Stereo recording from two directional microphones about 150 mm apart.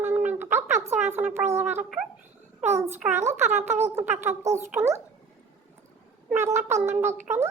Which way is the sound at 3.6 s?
50° right (ahead or behind).